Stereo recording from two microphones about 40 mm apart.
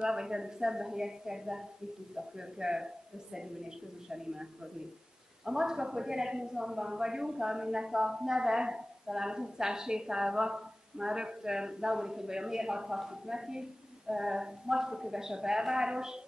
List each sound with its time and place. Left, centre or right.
0.0 s a man's voice: centre
4.1 s a man's voice: centre